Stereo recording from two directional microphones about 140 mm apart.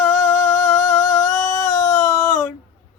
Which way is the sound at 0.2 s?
20° left (ahead or behind).